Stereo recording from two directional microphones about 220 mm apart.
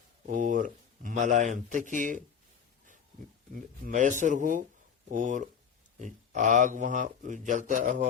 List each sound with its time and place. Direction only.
0.3 s speech: 35° right (ahead or behind)
3.5 s speech: 35° right (ahead or behind)